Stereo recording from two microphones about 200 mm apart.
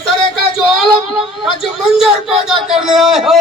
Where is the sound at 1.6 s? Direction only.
Centre (ahead or behind).